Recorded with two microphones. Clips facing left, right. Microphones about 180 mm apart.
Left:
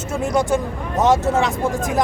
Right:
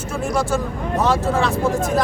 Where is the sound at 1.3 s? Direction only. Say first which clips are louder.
Right 1 dB; 15° left (ahead or behind).